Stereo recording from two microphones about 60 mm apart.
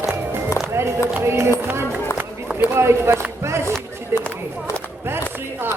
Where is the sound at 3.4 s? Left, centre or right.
Right.